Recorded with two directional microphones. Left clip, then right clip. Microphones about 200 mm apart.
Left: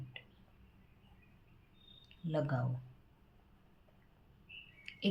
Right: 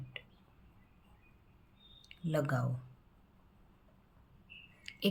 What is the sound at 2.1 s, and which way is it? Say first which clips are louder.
Speech: right 2 dB; 30° right (ahead or behind).